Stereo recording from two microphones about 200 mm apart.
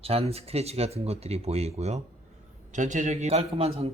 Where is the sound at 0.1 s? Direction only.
30° right (ahead or behind).